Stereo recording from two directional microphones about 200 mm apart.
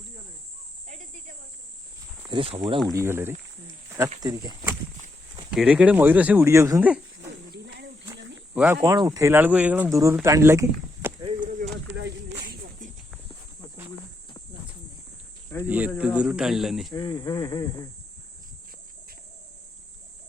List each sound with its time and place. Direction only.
2.2 s speech: 25° right (ahead or behind)
2.9 s speech: 15° right (ahead or behind)
5.5 s speech: 5° right (ahead or behind)
8.5 s speech: 10° right (ahead or behind)
11.9 s a sound: 55° right (ahead or behind)
15.6 s cricket: 10° right (ahead or behind)
16.0 s a sound: 5° right (ahead or behind)
16.9 s speech: 20° left (ahead or behind)